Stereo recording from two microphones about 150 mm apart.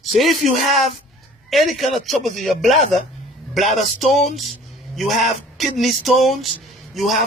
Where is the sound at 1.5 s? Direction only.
Centre (ahead or behind).